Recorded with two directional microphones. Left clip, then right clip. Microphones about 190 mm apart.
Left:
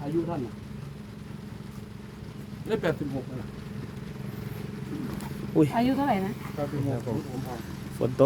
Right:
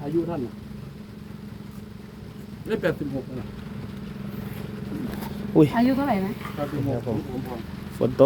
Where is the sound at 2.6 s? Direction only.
Centre (ahead or behind).